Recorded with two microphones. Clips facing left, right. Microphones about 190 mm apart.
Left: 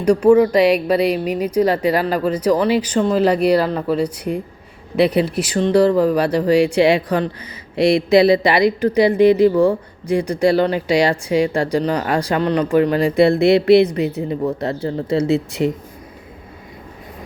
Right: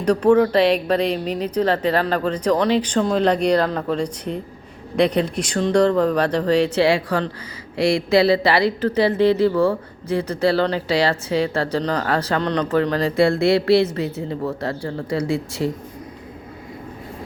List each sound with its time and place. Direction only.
0.0 s speech: 10° left (ahead or behind)